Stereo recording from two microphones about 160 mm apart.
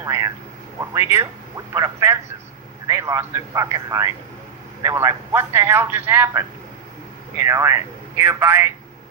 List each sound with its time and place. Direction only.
0.0 s a man's voice: 20° right (ahead or behind)